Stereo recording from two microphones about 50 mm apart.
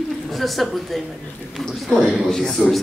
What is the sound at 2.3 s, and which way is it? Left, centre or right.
Speech, centre.